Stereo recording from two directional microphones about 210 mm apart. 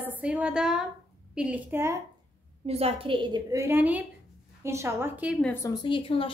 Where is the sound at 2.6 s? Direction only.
30° right (ahead or behind); by 5.4 s 5° right (ahead or behind).